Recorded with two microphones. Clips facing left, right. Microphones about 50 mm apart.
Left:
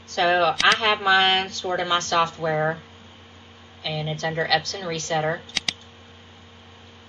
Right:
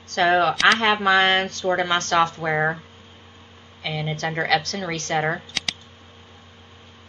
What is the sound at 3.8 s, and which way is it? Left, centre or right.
A woman's voice, right.